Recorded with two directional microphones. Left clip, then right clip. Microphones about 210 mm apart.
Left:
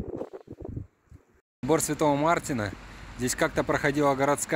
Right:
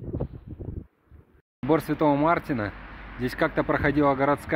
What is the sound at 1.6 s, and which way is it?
Speech, 10° left (ahead or behind).